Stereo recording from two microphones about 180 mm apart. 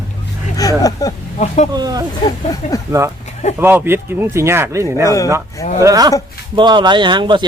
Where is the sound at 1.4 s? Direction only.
40° left (ahead or behind).